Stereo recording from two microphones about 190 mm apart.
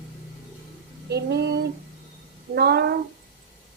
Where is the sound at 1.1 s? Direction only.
60° right (ahead or behind).